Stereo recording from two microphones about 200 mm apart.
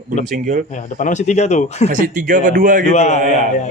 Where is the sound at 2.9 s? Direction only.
35° left (ahead or behind).